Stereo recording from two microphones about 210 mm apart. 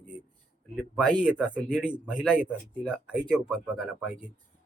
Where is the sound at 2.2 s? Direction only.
5° right (ahead or behind).